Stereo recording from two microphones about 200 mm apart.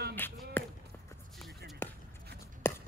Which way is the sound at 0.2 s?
10° left (ahead or behind).